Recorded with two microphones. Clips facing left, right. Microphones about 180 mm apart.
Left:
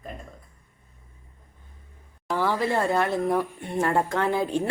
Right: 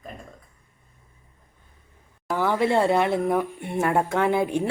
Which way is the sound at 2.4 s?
20° right (ahead or behind).